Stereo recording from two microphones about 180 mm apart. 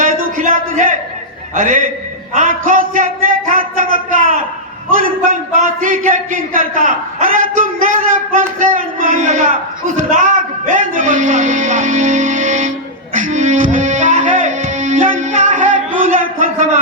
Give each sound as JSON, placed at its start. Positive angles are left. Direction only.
{"t": 0.0, "sound": "a sound", "side_deg": -50}
{"t": 1.5, "sound": "speech", "side_deg": -45}
{"t": 4.9, "sound": "speech", "side_deg": -50}
{"t": 10.8, "sound": "speech", "side_deg": -45}
{"t": 13.1, "sound": "music", "side_deg": -45}
{"t": 16.0, "sound": "a sound", "side_deg": -50}